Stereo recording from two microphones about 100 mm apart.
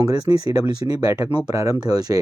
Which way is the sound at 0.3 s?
35° right (ahead or behind).